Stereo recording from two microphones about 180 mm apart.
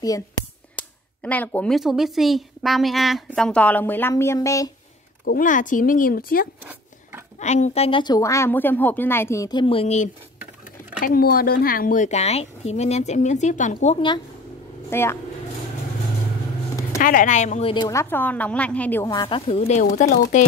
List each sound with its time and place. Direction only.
0.7 s speech: 10° left (ahead or behind)
5.2 s speech: 50° left (ahead or behind)
6.6 s a sound: 10° right (ahead or behind)
7.3 s a woman's voice: 40° left (ahead or behind)
11.1 s speech: 55° left (ahead or behind)
14.9 s speech: 15° left (ahead or behind)
17.0 s speech: 50° left (ahead or behind); by 17.8 s 30° left (ahead or behind)
17.8 s speech: 15° left (ahead or behind)
19.1 s speech: 30° left (ahead or behind)